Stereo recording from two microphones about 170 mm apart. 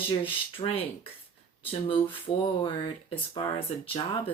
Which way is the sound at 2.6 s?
30° left (ahead or behind).